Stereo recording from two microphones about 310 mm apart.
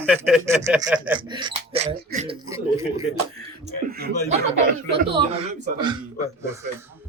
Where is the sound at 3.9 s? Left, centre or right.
Right.